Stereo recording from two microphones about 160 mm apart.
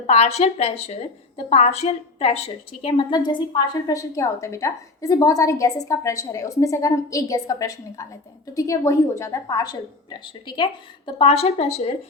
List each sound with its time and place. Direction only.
0.1 s a woman's voice: 40° left (ahead or behind)